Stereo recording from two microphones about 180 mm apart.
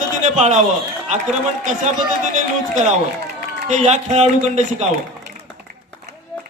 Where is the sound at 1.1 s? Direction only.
40° right (ahead or behind).